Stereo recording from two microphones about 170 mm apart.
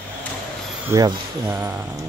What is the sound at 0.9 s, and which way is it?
Speech, 15° right (ahead or behind).